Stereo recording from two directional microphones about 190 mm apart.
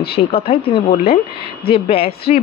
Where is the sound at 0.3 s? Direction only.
30° left (ahead or behind).